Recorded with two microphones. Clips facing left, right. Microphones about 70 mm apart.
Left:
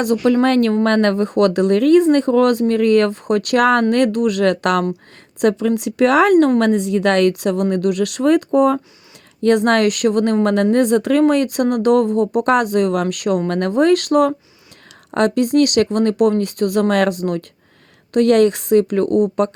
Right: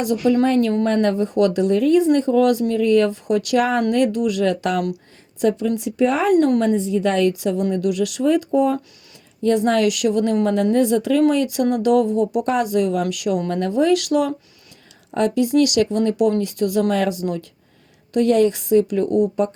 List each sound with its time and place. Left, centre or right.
0.0 s speech: left
15.1 s speech: left